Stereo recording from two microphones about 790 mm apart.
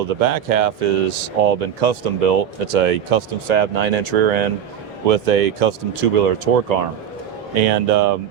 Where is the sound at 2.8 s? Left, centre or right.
Right.